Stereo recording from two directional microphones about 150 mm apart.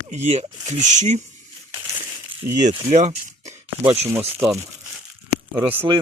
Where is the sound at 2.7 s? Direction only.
45° right (ahead or behind).